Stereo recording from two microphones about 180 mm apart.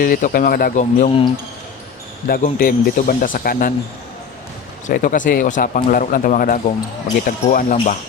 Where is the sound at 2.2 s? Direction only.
55° left (ahead or behind).